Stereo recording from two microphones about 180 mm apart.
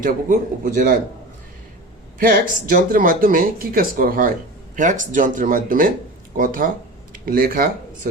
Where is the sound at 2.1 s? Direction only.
50° right (ahead or behind).